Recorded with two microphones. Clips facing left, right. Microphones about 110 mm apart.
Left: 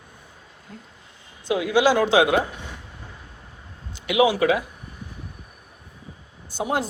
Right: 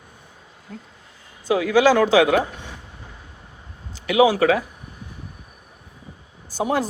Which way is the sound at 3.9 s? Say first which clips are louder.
Right 3 dB; 40° right (ahead or behind).